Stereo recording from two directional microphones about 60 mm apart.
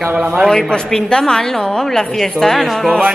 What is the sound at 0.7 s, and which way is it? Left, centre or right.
A woman's voice, centre.